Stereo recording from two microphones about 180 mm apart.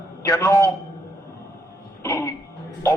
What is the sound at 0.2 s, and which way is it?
Speech, 15° left (ahead or behind).